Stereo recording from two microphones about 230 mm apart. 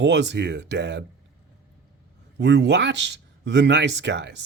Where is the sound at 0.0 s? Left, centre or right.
Right.